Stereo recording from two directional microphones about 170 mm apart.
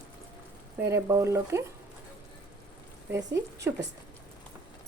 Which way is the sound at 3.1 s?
20° right (ahead or behind).